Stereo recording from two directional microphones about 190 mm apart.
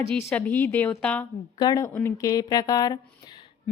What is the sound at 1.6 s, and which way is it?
A woman's voice, 20° left (ahead or behind).